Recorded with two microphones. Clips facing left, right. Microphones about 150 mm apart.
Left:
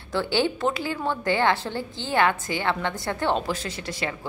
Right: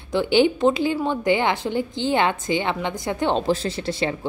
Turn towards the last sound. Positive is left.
turn(degrees=-30)  # may be behind; listen again after turning